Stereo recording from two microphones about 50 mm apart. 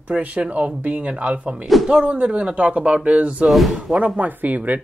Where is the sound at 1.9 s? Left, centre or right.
Right.